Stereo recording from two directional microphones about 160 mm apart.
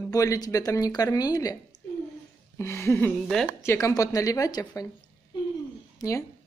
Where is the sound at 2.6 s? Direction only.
15° left (ahead or behind).